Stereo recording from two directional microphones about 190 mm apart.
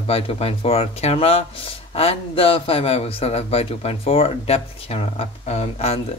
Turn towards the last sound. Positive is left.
turn(degrees=35)  # may be behind; listen again after turning